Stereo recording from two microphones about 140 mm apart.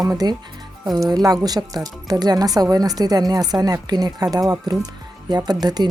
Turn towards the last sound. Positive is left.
turn(degrees=-30)  # may be behind; listen again after turning